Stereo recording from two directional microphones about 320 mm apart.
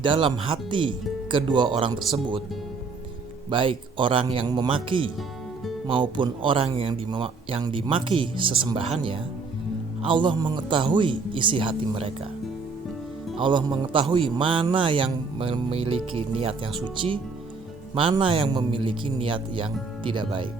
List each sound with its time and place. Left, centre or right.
0.0 s a man's voice: centre
3.5 s a man's voice: centre
10.0 s a man's voice: centre
13.4 s a man's voice: centre